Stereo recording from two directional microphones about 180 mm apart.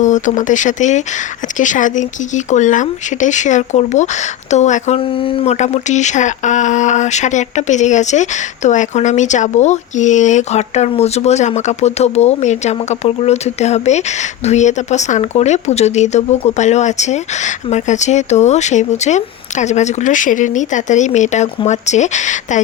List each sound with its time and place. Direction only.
0.0 s speech: 45° left (ahead or behind)